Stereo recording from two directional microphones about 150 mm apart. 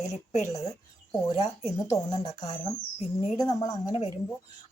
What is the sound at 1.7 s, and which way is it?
Speech, 25° left (ahead or behind).